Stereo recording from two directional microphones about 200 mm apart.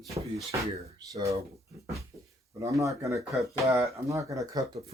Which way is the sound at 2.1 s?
15° right (ahead or behind).